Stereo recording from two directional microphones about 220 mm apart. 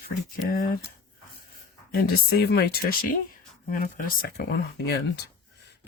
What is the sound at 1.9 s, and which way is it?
Speech, 45° left (ahead or behind).